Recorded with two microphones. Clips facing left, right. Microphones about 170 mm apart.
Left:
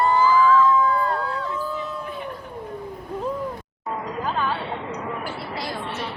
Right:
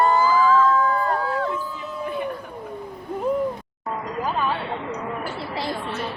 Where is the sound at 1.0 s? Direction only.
50° right (ahead or behind).